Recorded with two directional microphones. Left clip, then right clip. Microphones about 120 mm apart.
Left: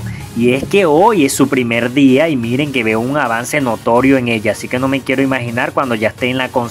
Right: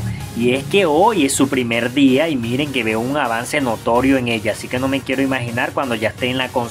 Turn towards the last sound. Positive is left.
turn(degrees=30)  # may be behind; listen again after turning